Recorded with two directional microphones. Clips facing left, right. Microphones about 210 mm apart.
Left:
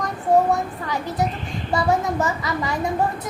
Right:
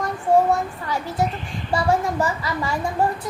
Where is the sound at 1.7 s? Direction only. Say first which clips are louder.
Even; 20° left (ahead or behind).